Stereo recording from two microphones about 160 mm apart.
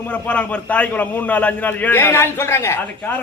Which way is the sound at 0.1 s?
10° left (ahead or behind).